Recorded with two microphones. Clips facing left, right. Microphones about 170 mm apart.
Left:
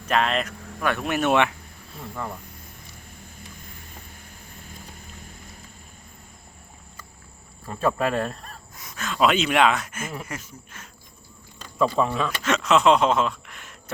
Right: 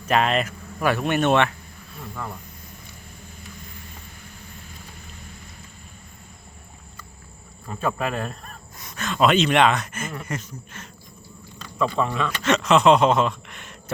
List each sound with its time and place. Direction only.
0.1 s speech: 5° right (ahead or behind)
7.8 s speech: 30° left (ahead or behind)
8.8 s speech: centre (ahead or behind)
11.9 s speech: 5° left (ahead or behind)